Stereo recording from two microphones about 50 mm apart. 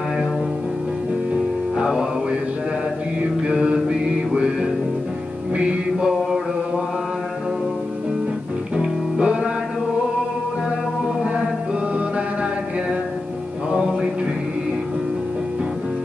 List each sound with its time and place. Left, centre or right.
1.3 s music: centre
3.2 s mantra: right
4.3 s music: centre
8.7 s music: right